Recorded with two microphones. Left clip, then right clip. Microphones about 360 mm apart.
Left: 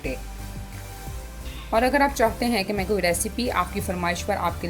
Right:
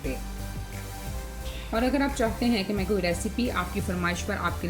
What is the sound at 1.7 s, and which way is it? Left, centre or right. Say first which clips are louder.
A woman's voice: left 6 dB; centre.